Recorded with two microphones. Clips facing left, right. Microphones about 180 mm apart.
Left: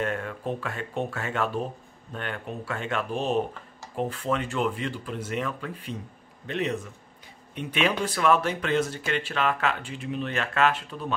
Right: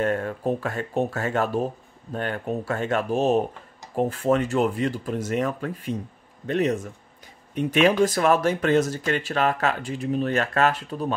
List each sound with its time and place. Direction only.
0.0 s speech: 40° right (ahead or behind)